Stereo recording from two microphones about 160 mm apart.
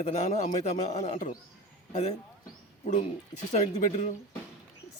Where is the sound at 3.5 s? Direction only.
45° left (ahead or behind).